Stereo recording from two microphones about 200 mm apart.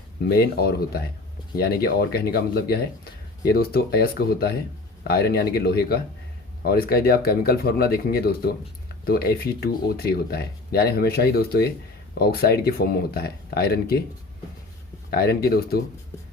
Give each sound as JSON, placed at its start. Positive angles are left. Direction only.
{"t": 0.3, "sound": "speech", "side_deg": 50}
{"t": 15.1, "sound": "speech", "side_deg": 50}